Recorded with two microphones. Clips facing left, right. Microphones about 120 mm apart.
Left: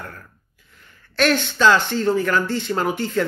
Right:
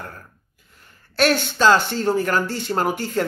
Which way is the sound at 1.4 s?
45° right (ahead or behind).